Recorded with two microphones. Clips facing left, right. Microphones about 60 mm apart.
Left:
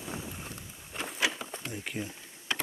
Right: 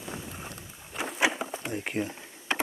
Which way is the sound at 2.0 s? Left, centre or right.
Right.